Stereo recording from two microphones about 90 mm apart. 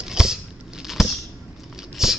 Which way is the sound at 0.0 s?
5° right (ahead or behind).